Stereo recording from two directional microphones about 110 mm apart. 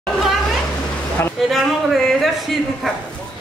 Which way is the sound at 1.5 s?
Centre (ahead or behind).